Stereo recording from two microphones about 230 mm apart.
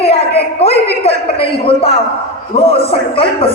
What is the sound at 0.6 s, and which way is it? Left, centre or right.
Speech, left.